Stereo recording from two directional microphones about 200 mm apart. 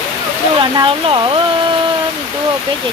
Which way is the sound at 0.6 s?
25° right (ahead or behind).